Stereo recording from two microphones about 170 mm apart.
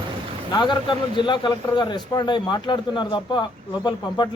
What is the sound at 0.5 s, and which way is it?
A man's voice, 25° left (ahead or behind).